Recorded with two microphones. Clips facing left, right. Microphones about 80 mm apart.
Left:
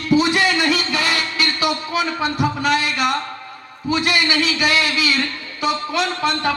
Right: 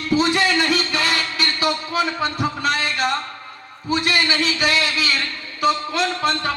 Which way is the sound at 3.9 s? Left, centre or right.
Right.